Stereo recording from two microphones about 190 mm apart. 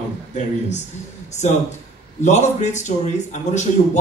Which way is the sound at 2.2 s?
40° left (ahead or behind).